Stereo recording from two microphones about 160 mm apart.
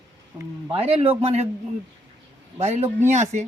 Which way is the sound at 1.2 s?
40° right (ahead or behind).